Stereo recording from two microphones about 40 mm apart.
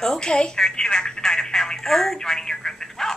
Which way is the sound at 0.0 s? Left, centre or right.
Centre.